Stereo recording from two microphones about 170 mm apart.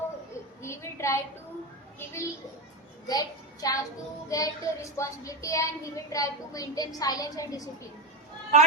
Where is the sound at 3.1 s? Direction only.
20° left (ahead or behind).